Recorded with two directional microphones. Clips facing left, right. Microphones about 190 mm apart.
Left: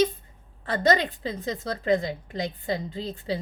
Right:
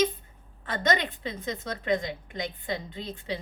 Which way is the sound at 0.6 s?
35° left (ahead or behind).